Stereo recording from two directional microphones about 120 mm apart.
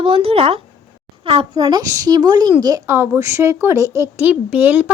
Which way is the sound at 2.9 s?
20° right (ahead or behind).